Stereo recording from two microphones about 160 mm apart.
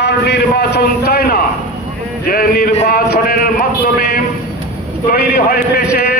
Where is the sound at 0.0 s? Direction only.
85° left.